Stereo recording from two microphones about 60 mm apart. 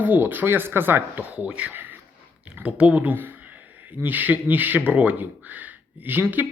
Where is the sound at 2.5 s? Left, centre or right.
Right.